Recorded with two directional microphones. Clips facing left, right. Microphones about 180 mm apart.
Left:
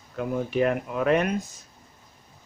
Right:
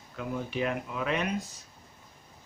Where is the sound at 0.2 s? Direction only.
50° left (ahead or behind).